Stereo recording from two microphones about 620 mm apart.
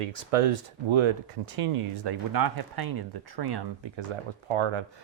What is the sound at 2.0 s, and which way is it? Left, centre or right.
Speech, right.